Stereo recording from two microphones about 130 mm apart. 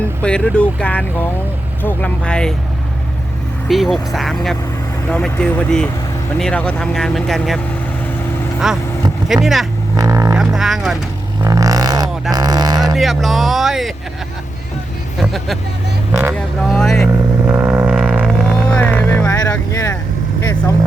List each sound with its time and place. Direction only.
0.2 s speech: 10° left (ahead or behind)
3.7 s speech: centre (ahead or behind)
8.6 s speech: 5° right (ahead or behind)
10.0 s vehicle: 30° right (ahead or behind)
10.3 s speech: 5° right (ahead or behind)
11.4 s a sound: 25° right (ahead or behind)
13.0 s speech: centre (ahead or behind)
15.2 s speech: centre (ahead or behind)
16.6 s speech: 5° left (ahead or behind)
17.1 s vehicle: 20° right (ahead or behind)
18.9 s vehicle: 15° left (ahead or behind)
20.4 s speech: 25° left (ahead or behind)